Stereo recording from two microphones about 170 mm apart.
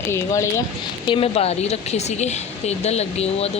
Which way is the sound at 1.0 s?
30° left (ahead or behind).